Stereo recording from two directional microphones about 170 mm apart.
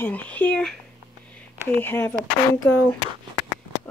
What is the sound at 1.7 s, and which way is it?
Speech, 10° left (ahead or behind).